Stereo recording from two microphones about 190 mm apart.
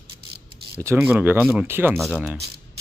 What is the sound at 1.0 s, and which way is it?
Speech, 10° right (ahead or behind).